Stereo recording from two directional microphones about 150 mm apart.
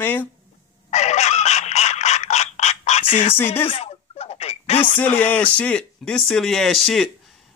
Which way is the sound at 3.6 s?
40° left (ahead or behind).